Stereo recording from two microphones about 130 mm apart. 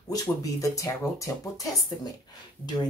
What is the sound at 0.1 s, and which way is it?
Speech, 25° left (ahead or behind).